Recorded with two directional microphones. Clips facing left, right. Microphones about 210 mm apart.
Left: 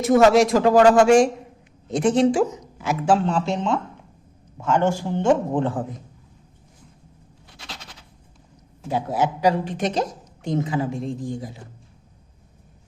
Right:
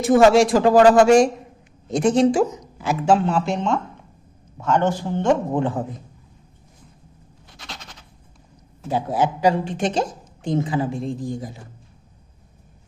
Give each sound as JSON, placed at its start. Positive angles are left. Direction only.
{"t": 0.0, "sound": "a woman's voice", "side_deg": -30}
{"t": 3.2, "sound": "speech", "side_deg": -5}
{"t": 5.5, "sound": "a woman's voice", "side_deg": -10}
{"t": 8.9, "sound": "a woman's voice", "side_deg": -30}